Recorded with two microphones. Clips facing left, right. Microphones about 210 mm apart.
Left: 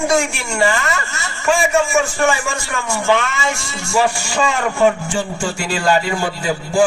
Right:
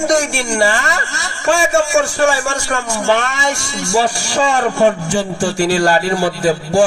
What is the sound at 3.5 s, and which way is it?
Speech, 75° right (ahead or behind).